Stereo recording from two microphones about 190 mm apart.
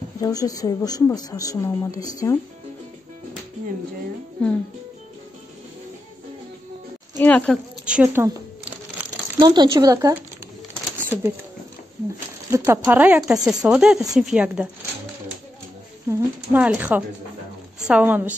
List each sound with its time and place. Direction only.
0.2 s speech: 20° left (ahead or behind)
7.2 s speech: 5° left (ahead or behind)
7.8 s a sound: 5° right (ahead or behind)
9.4 s speech: 25° right (ahead or behind)
12.4 s a woman's voice: 15° right (ahead or behind)
16.1 s a woman's voice: 10° right (ahead or behind)